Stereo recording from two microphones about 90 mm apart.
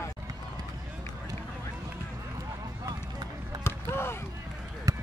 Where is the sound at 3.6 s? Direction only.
25° left (ahead or behind).